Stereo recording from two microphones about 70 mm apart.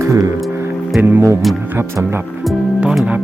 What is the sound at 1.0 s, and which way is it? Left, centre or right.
Speech, right.